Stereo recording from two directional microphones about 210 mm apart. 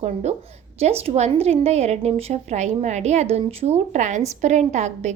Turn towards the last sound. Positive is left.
turn(degrees=-35)  # may be behind; listen again after turning